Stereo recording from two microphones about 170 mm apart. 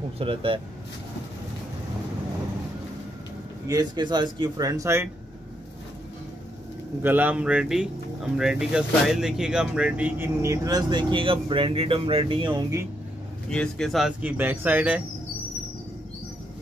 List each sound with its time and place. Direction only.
0.2 s speech: 30° right (ahead or behind)
3.6 s speech: 25° right (ahead or behind)
7.0 s speech: 10° right (ahead or behind); by 12.8 s 25° right (ahead or behind)
13.5 s speech: 5° left (ahead or behind); by 15.0 s 10° right (ahead or behind)